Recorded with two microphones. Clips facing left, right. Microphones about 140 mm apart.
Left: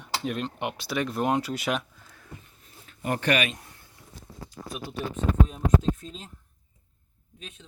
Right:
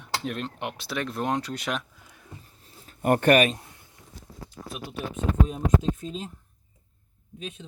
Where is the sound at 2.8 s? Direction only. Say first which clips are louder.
Right 6 dB; 50° right (ahead or behind).